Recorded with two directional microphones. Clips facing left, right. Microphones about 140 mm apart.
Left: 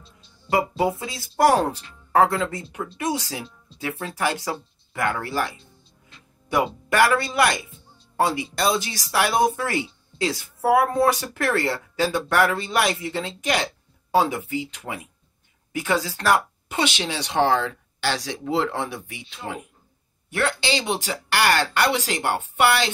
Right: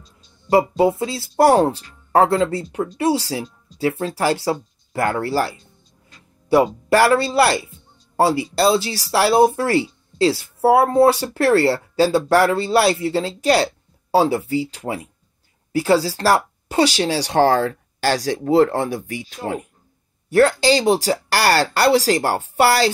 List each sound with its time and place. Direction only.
0.0 s speech: 30° right (ahead or behind)